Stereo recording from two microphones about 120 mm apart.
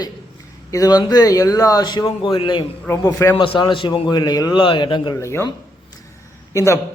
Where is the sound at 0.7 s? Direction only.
30° left (ahead or behind).